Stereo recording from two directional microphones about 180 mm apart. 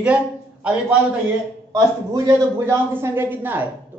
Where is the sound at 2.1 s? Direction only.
20° right (ahead or behind).